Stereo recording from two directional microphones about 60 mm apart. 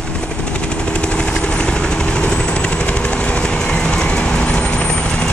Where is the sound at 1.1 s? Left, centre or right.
Centre.